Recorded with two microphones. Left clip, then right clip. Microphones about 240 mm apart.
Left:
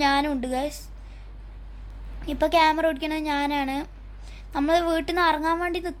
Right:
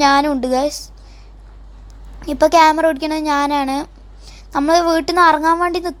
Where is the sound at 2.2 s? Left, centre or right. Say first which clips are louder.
Right 9 dB; right.